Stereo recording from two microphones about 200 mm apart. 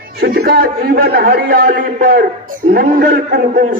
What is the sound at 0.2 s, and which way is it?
A man's voice, 50° right (ahead or behind).